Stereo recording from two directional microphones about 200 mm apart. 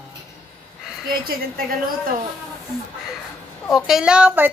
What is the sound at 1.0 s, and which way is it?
Speech, 45° right (ahead or behind).